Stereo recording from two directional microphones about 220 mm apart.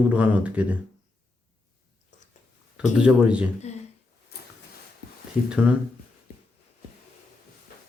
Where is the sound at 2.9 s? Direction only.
5° right (ahead or behind).